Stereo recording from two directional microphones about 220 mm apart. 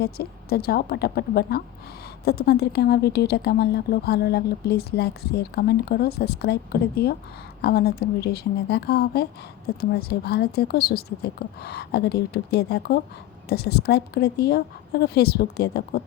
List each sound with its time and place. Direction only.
0.0 s speech: 45° left (ahead or behind)